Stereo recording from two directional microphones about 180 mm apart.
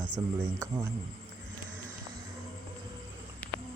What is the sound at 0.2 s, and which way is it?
Speech, 20° right (ahead or behind).